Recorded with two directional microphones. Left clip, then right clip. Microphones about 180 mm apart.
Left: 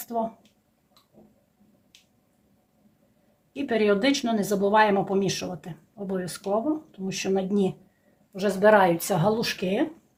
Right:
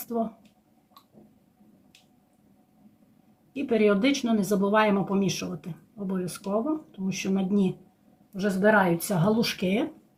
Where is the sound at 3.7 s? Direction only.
45° left (ahead or behind).